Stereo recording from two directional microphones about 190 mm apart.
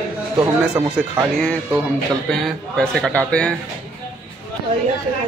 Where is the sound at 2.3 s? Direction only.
5° left (ahead or behind).